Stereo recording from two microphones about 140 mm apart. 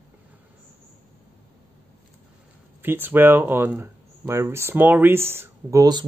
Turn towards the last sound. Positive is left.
turn(degrees=-25)  # may be behind; listen again after turning